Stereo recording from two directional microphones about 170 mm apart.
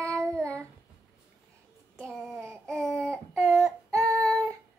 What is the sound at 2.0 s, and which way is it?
Child singing, 5° left (ahead or behind).